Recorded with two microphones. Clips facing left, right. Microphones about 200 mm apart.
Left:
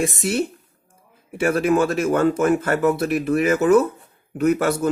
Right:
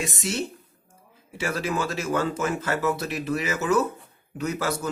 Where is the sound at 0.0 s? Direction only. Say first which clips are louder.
Left 7 dB; 55° left (ahead or behind).